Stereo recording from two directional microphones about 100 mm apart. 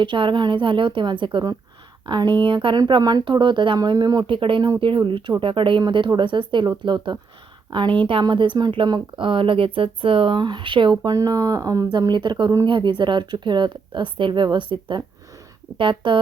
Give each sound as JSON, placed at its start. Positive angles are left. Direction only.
{"t": 0.0, "sound": "speech", "side_deg": -55}
{"t": 4.3, "sound": "speech", "side_deg": -60}